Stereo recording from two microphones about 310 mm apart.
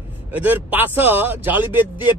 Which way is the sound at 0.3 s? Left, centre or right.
Centre.